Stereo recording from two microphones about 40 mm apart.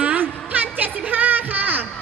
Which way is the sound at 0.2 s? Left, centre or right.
Right.